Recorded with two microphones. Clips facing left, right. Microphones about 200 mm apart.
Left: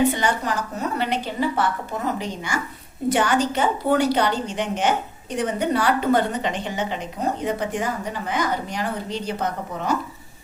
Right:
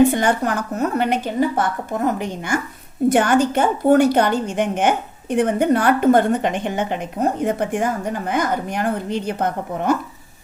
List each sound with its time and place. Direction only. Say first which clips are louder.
0.1 s a woman's voice: right 5 dB; 50° right (ahead or behind)